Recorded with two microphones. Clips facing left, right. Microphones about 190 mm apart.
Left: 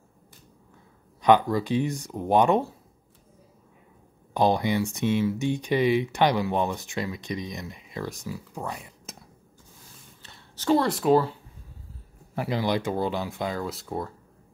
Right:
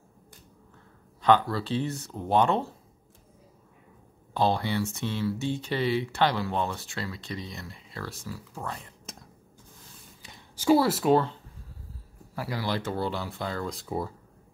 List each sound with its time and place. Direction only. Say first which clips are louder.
1.2 s speech: left 3 dB; 15° left (ahead or behind)
4.3 s speech: left 3 dB; 15° left (ahead or behind)
9.0 s a sound: left 1 dB; 5° left (ahead or behind)
10.2 s speech: right 2 dB; 10° right (ahead or behind)
12.4 s speech: left 5 dB; 20° left (ahead or behind)
13.7 s speech: even; centre (ahead or behind)